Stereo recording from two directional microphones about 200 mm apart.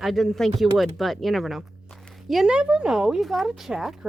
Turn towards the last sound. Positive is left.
turn(degrees=0)  # may be behind; listen again after turning